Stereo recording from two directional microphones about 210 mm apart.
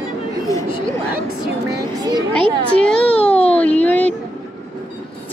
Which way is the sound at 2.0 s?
20° right (ahead or behind).